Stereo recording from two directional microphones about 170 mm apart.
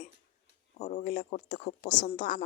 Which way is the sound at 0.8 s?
45° left (ahead or behind).